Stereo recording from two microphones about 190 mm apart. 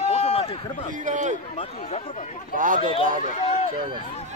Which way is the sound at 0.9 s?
40° right (ahead or behind).